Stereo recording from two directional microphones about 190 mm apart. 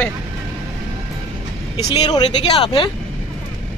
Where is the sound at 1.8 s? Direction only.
20° left (ahead or behind).